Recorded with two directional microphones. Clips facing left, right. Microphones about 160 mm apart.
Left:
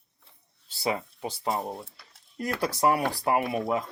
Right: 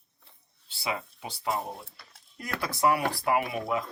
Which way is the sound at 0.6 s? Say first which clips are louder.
Left 4 dB; 40° left (ahead or behind).